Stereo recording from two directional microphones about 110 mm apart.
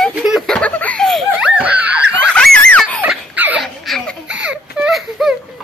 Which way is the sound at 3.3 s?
15° right (ahead or behind).